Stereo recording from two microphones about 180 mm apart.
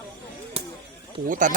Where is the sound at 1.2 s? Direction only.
50° right (ahead or behind).